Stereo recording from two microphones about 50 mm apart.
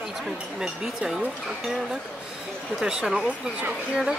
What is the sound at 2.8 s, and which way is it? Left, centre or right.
Speech, centre.